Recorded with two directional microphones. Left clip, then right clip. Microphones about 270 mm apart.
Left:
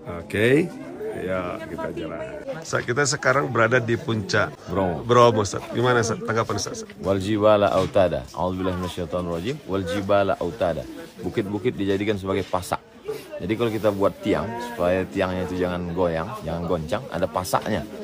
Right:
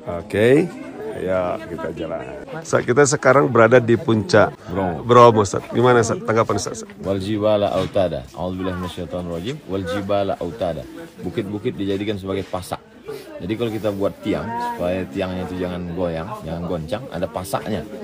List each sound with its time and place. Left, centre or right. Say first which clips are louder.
0.1 s speech: right 4 dB; centre
2.7 s speech: right 8 dB; centre